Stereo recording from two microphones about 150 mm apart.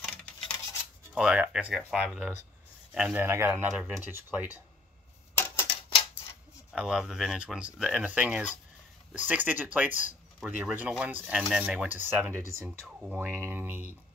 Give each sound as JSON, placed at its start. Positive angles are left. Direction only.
{"t": 1.1, "sound": "speech", "side_deg": -5}
{"t": 5.3, "sound": "a sound", "side_deg": 15}
{"t": 6.7, "sound": "speech", "side_deg": -5}
{"t": 12.6, "sound": "speech", "side_deg": -5}